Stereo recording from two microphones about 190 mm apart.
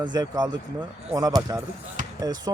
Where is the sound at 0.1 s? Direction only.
20° right (ahead or behind).